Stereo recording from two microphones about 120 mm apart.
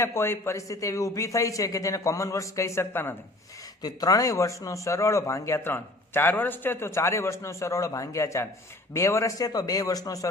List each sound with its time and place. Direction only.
0.0 s speech: 20° left (ahead or behind)
3.8 s speech: 30° left (ahead or behind)